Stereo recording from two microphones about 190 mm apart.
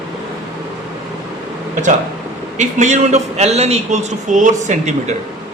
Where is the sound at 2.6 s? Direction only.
40° right (ahead or behind).